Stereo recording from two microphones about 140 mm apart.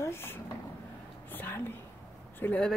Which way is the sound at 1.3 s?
15° left (ahead or behind).